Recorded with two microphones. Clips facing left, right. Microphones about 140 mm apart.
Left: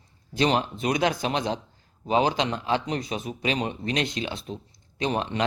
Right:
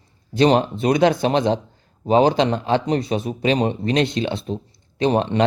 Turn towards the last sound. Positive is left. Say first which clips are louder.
# right 8 dB
turn(degrees=-30)  # may be behind; listen again after turning